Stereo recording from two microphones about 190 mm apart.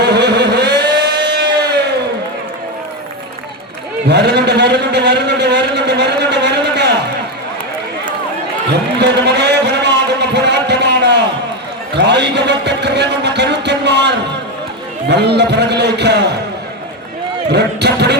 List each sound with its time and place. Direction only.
0.0 s vehicle: 60° right (ahead or behind)
4.1 s vehicle: 60° right (ahead or behind)
9.0 s a sound: 60° right (ahead or behind)
11.9 s a man's voice: 65° right (ahead or behind)
17.5 s a man's voice: 60° right (ahead or behind)